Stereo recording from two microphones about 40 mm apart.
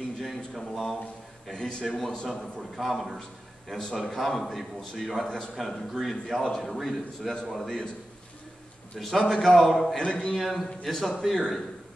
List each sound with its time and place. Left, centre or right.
0.2 s a sound: centre
1.5 s a man's voice: centre
1.9 s a man's voice: centre
8.9 s a man's voice: centre
10.0 s a man's voice: left
10.4 s a man's voice: centre